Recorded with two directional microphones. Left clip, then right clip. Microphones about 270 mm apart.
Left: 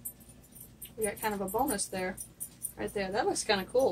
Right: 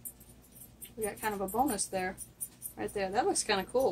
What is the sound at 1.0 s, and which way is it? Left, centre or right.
A woman's voice, right.